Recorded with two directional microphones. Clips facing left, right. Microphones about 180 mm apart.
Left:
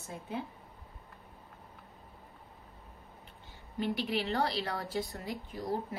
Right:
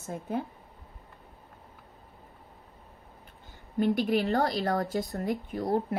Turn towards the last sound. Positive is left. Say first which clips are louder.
# right 7 dB
turn(degrees=-60)  # may be behind; listen again after turning